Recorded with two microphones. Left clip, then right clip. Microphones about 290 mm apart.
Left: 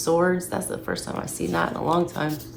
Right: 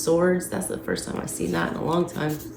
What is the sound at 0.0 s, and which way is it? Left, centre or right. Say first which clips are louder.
Speech: even; centre.